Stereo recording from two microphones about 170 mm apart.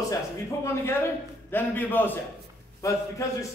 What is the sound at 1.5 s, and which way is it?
A man's voice, 10° left (ahead or behind).